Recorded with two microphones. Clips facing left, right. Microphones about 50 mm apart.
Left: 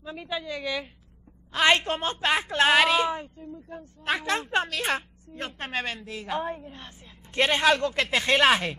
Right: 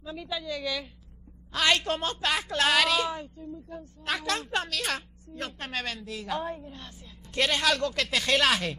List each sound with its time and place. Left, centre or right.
0.0 s a woman's voice: left